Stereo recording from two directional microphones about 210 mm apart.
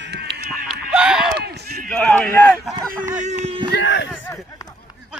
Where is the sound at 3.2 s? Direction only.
30° right (ahead or behind).